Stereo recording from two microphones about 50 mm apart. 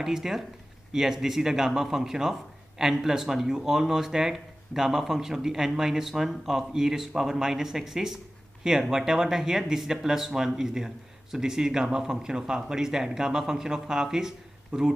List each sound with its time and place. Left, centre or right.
0.0 s speech: centre